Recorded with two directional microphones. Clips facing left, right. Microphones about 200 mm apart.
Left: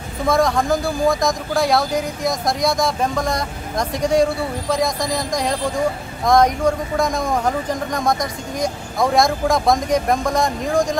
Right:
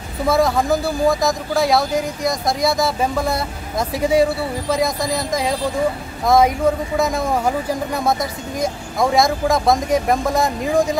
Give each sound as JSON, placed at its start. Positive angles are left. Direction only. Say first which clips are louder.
{"t": 0.3, "sound": "speech", "louder": "right 1 dB", "side_deg": -5}